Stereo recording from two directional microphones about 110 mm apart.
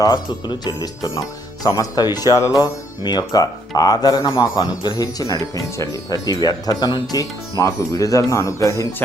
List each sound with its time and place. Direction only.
0.0 s speech: 40° left (ahead or behind)